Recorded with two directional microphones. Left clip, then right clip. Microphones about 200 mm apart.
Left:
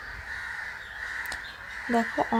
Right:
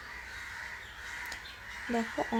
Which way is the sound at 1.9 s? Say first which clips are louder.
Left 7 dB; 15° left (ahead or behind).